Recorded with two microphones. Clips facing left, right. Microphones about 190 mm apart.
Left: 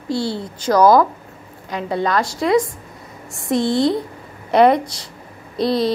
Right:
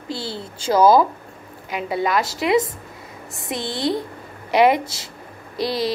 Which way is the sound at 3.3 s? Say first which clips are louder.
Left 10 dB; centre (ahead or behind).